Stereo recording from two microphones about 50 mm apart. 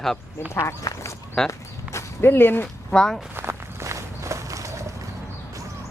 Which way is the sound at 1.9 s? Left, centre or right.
Left.